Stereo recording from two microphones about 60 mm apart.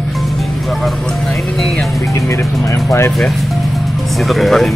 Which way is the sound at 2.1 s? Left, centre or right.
Left.